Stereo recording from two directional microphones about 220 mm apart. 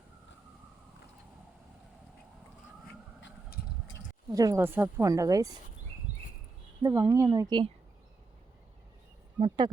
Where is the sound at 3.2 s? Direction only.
45° left (ahead or behind).